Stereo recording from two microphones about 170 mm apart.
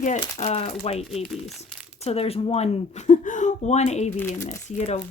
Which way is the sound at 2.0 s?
35° left (ahead or behind).